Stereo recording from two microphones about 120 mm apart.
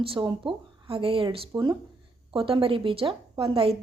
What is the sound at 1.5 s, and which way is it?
Speech, 35° right (ahead or behind).